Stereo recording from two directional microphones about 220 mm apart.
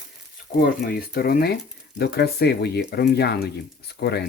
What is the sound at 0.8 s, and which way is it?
Speech, 45° left (ahead or behind).